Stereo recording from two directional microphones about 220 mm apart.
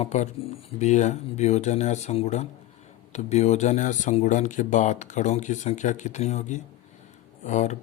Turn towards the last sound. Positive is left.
turn(degrees=30)  # may be behind; listen again after turning